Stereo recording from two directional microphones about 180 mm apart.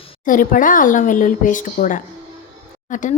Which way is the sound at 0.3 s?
50° left (ahead or behind).